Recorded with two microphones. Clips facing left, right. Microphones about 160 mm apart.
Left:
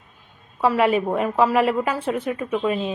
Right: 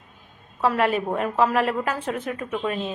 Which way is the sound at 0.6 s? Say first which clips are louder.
Left 3 dB; 10° left (ahead or behind).